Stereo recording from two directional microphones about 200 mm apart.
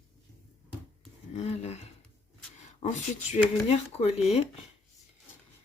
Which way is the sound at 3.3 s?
30° left (ahead or behind).